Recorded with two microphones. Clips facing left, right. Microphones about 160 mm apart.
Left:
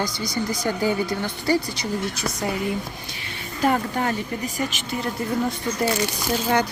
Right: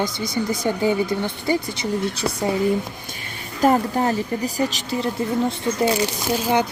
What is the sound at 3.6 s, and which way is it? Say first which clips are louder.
A woman's voice: right 4 dB; 35° right (ahead or behind).